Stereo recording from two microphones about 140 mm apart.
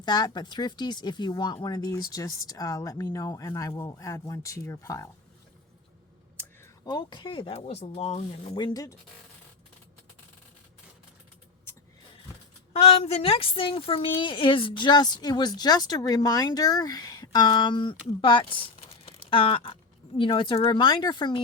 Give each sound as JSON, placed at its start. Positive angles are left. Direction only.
{"t": 0.0, "sound": "a woman's voice", "side_deg": 30}
{"t": 6.8, "sound": "a woman's voice", "side_deg": 35}
{"t": 7.5, "sound": "speech", "side_deg": 50}
{"t": 8.5, "sound": "speech", "side_deg": 30}
{"t": 12.7, "sound": "a woman's voice", "side_deg": 45}